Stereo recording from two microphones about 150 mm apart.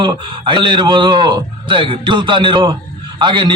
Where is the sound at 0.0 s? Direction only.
35° right (ahead or behind).